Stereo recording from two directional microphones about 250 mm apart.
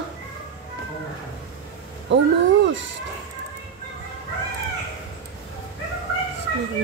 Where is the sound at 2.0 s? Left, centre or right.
Right.